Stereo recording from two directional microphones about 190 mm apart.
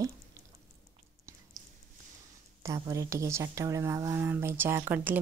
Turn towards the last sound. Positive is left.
turn(degrees=-10)  # may be behind; listen again after turning